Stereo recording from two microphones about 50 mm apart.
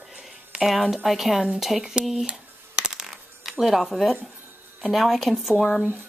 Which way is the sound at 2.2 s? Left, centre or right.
Centre.